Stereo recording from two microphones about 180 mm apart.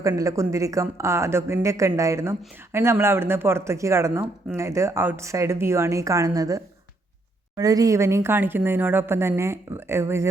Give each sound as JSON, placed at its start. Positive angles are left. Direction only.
{"t": 0.0, "sound": "a woman's voice", "side_deg": -20}